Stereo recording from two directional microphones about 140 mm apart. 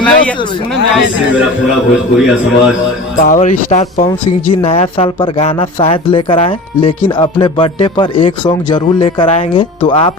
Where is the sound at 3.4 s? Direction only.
55° left (ahead or behind).